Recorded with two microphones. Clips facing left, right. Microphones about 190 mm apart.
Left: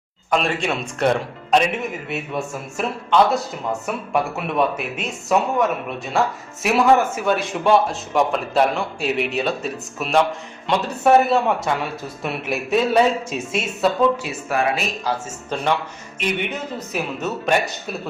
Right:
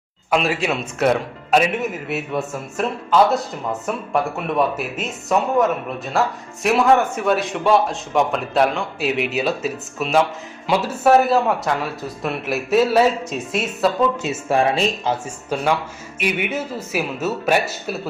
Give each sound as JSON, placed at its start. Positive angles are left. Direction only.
{"t": 0.3, "sound": "a man's voice", "side_deg": -5}
{"t": 14.2, "sound": "speech", "side_deg": -25}
{"t": 16.1, "sound": "a man's voice", "side_deg": -10}